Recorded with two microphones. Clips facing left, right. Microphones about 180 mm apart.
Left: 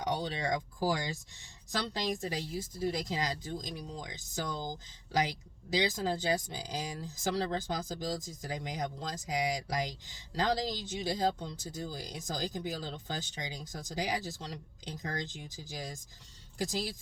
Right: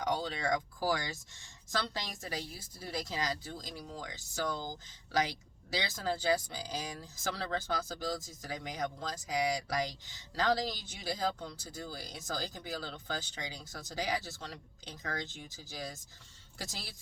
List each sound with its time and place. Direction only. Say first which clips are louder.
0.0 s speech: even; 20° left (ahead or behind)
5.7 s speech: left 4 dB; 15° left (ahead or behind)